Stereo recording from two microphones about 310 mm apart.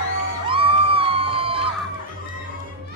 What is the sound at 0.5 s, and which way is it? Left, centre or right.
Crowd, centre.